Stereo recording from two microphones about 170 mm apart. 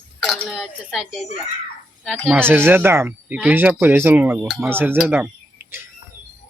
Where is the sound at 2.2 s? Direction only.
10° right (ahead or behind).